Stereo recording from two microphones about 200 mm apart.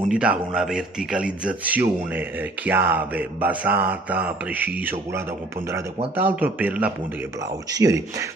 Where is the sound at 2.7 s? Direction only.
10° right (ahead or behind).